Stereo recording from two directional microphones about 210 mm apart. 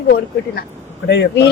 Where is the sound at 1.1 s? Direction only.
55° left (ahead or behind).